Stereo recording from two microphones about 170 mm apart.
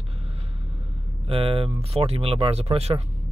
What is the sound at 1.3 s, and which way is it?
Speech, 35° right (ahead or behind).